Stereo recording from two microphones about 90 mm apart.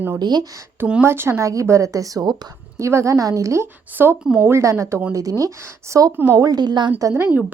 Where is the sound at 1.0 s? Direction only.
25° right (ahead or behind).